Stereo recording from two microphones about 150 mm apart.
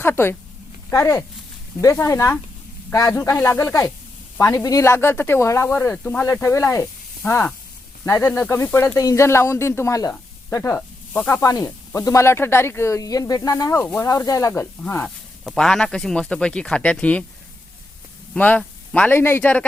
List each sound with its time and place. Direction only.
0.0 s speech: 15° left (ahead or behind)
14.1 s speech: 20° left (ahead or behind)
15.4 s speech: 5° left (ahead or behind)
18.3 s speech: 10° left (ahead or behind)